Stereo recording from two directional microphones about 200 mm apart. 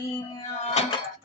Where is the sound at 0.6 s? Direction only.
35° left (ahead or behind).